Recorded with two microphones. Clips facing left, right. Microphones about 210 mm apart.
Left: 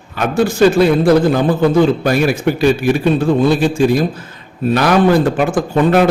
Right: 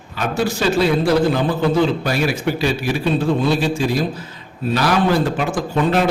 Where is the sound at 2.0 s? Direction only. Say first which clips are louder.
Left 6 dB; 50° left (ahead or behind).